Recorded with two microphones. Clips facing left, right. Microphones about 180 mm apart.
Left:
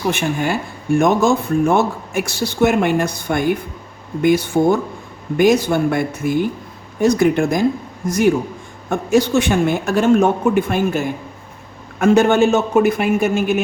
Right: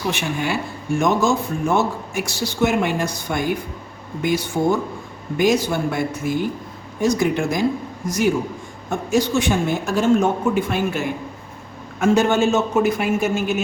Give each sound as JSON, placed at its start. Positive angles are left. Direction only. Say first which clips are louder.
{"t": 0.1, "sound": "speech", "louder": "left 4 dB", "side_deg": 50}